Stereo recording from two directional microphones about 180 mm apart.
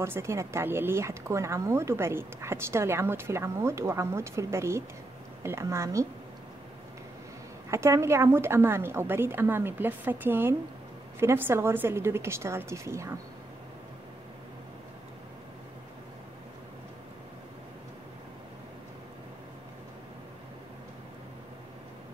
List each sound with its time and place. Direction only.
0.0 s speech: 15° right (ahead or behind)
7.7 s speech: 15° right (ahead or behind)